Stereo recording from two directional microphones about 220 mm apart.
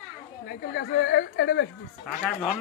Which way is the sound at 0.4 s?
50° left (ahead or behind).